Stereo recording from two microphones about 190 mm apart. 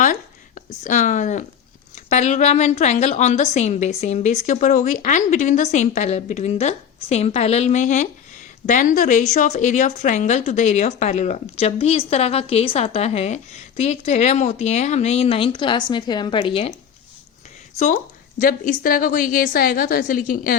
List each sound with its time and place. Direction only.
0.0 s a sound: 45° left (ahead or behind)
2.0 s a woman's voice: 35° left (ahead or behind)
17.7 s a woman's voice: 45° left (ahead or behind)